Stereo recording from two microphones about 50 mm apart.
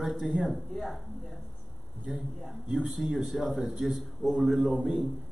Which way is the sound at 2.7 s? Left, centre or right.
Centre.